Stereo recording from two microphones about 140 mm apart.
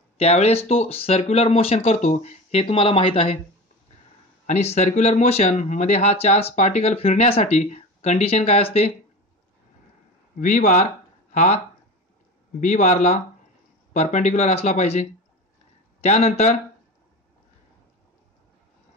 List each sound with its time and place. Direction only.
0.2 s speech: 50° left (ahead or behind)
2.0 s speech: 55° left (ahead or behind)
4.5 s speech: 50° left (ahead or behind)
10.3 s speech: 65° left (ahead or behind)